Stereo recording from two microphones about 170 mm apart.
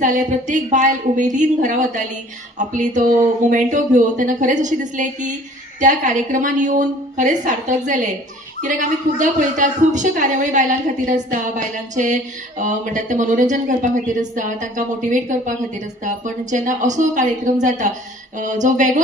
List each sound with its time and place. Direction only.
0.0 s a woman's voice: 50° right (ahead or behind)